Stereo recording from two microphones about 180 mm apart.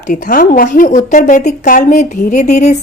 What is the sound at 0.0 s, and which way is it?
A woman's voice, 45° left (ahead or behind).